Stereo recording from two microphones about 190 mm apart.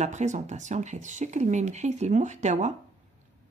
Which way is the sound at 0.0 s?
40° right (ahead or behind).